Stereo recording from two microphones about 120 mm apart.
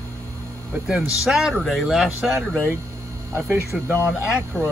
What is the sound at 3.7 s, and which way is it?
Speech, 5° right (ahead or behind).